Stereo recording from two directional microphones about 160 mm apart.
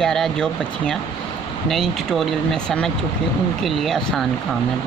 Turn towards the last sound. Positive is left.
turn(degrees=0)  # may be behind; listen again after turning